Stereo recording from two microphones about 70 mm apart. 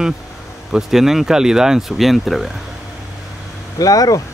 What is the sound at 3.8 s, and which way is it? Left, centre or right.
Speech, left.